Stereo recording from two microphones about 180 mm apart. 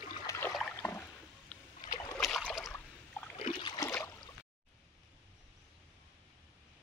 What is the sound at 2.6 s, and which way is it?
Boat, 15° left (ahead or behind).